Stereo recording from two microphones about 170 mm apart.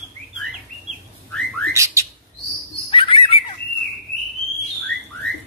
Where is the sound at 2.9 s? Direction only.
30° left (ahead or behind).